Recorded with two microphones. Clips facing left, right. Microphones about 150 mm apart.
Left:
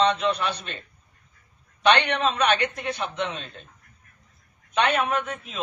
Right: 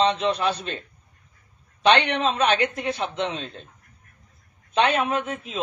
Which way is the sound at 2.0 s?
25° right (ahead or behind).